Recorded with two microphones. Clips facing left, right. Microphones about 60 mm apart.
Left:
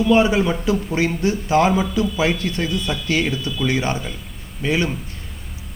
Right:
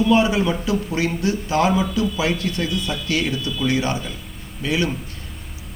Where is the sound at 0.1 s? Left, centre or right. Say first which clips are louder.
Left 5 dB; centre.